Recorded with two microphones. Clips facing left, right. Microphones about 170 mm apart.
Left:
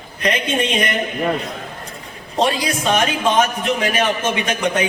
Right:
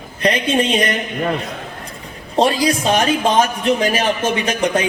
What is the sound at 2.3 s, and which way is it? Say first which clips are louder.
A man's voice: right 4 dB; 35° right (ahead or behind).